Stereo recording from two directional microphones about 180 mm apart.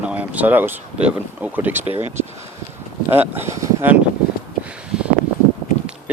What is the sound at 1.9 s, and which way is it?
Speech, 30° left (ahead or behind).